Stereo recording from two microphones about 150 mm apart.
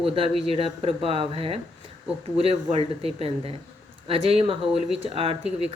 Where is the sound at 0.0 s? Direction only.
40° right (ahead or behind).